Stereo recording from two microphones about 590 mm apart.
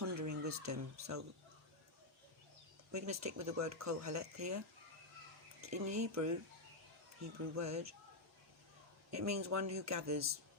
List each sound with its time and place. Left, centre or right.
0.0 s a sound: right
2.9 s speech: right
7.5 s speech: right
9.0 s speech: right